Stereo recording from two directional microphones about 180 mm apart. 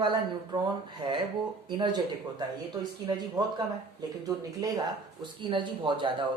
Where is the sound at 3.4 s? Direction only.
20° right (ahead or behind).